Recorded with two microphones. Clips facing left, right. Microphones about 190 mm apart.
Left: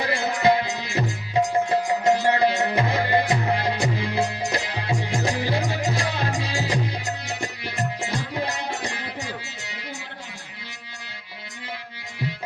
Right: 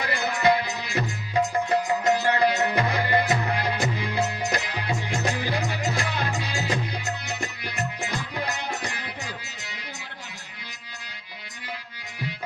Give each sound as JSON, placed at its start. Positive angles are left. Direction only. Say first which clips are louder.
{"t": 0.0, "sound": "music", "louder": "left 2 dB", "side_deg": 30}